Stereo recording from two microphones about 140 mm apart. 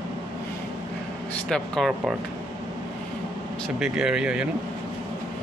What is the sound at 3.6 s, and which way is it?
Speech, 5° right (ahead or behind).